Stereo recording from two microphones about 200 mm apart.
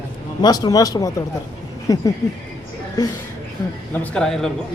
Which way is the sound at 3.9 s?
5° left (ahead or behind).